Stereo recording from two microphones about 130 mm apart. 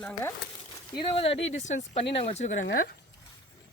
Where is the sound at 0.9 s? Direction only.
40° left (ahead or behind).